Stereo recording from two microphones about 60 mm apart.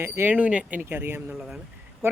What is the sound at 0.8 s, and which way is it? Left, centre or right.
Speech, right.